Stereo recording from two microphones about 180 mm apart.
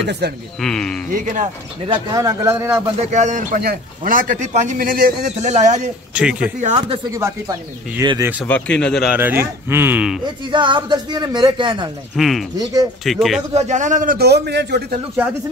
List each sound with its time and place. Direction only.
0.0 s speech: 70° right (ahead or behind)
0.6 s speech: 5° left (ahead or behind)
1.1 s speech: 45° right (ahead or behind)
1.9 s speech: 20° right (ahead or behind)
3.0 s speech: 40° right (ahead or behind)
5.3 s speech: 40° right (ahead or behind)
6.1 s speech: 5° right (ahead or behind)
6.6 s speech: 40° right (ahead or behind)
7.1 s speech: 15° right (ahead or behind)
8.5 s speech: 5° left (ahead or behind)
9.1 s speech: 10° right (ahead or behind)
10.5 s speech: 25° right (ahead or behind)
12.2 s speech: centre (ahead or behind)
13.5 s speech: 40° right (ahead or behind); by 15.0 s 70° right (ahead or behind)